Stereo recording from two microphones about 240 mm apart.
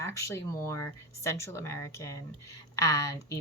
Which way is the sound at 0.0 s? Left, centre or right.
Centre.